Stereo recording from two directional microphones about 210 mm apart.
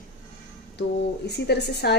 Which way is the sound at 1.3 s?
50° left (ahead or behind).